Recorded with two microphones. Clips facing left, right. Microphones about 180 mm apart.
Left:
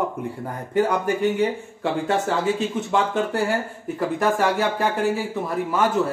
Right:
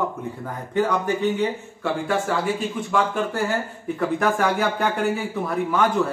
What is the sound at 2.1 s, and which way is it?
Speech, 20° left (ahead or behind).